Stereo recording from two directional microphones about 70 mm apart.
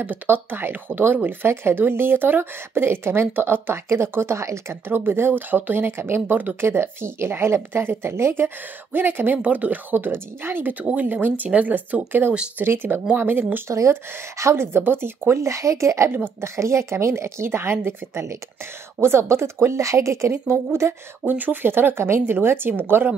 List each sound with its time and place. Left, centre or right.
0.0 s a woman's voice: right
13.7 s speech: right
21.3 s speech: right